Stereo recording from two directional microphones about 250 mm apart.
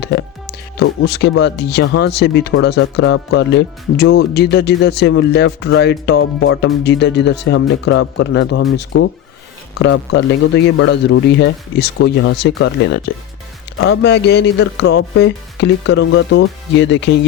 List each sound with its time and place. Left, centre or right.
0.0 s music: left
1.0 s speech: left